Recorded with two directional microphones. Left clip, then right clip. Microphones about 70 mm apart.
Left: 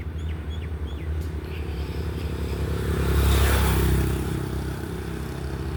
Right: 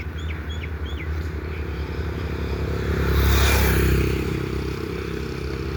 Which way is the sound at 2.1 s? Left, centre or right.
Centre.